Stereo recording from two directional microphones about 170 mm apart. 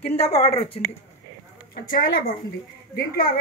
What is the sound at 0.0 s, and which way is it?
Speech, 35° left (ahead or behind).